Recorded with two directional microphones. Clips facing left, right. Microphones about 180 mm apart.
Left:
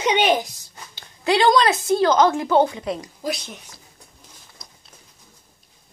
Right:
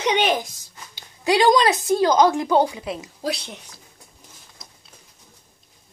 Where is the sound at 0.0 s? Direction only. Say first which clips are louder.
Left 2 dB; 5° left (ahead or behind).